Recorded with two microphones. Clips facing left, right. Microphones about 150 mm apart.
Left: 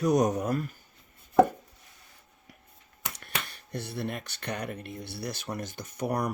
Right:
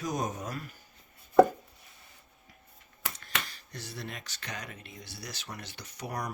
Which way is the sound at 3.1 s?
60° left (ahead or behind).